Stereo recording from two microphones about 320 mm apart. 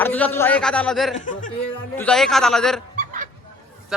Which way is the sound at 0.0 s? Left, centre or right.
Centre.